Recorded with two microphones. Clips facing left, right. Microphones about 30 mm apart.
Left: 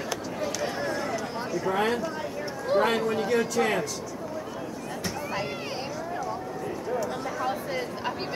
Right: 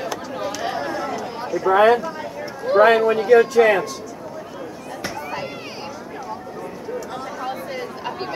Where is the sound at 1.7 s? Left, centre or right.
Right.